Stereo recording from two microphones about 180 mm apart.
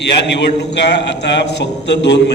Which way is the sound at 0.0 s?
75° left (ahead or behind).